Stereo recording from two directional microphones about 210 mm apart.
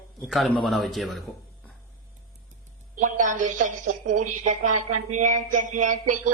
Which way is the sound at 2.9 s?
35° right (ahead or behind).